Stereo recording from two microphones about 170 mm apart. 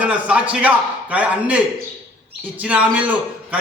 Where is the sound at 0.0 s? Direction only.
10° right (ahead or behind).